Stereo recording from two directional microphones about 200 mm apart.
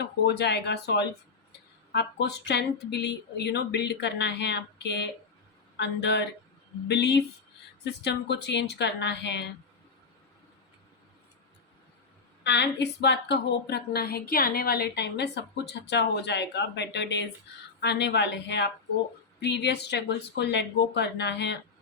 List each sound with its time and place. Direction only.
0.0 s a woman's voice: 55° left (ahead or behind)
12.4 s a woman's voice: 60° left (ahead or behind)